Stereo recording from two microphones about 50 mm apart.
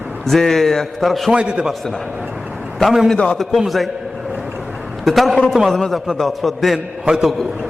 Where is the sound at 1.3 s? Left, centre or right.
Centre.